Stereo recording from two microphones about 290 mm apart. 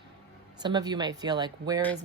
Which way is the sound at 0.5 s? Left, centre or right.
Centre.